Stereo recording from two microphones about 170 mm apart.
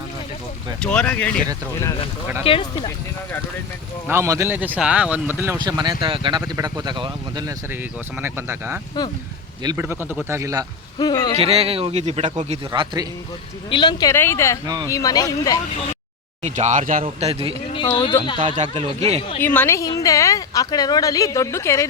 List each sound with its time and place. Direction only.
0.8 s speech: 5° left (ahead or behind)
2.4 s a woman's voice: 30° left (ahead or behind)
4.1 s speech: 15° right (ahead or behind)
5.5 s speech: 25° right (ahead or behind)
8.2 s speech: 15° right (ahead or behind)
11.0 s a woman's voice: 20° left (ahead or behind)
11.3 s a man's voice: 35° right (ahead or behind)
13.7 s a woman's voice: 25° left (ahead or behind)
14.1 s a woman's voice: 15° left (ahead or behind)
16.4 s speech: 45° right (ahead or behind)
17.0 s a man's voice: 35° right (ahead or behind)
17.7 s speech: 30° left (ahead or behind)
18.5 s a man's voice: 40° right (ahead or behind)
19.4 s a woman's voice: 10° left (ahead or behind)